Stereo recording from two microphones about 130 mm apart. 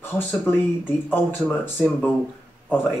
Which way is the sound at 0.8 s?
15° left (ahead or behind).